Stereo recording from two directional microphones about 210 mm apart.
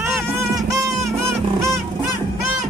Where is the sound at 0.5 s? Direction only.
15° right (ahead or behind).